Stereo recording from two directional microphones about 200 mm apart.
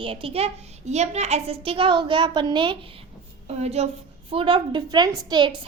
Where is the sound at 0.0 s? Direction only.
25° right (ahead or behind).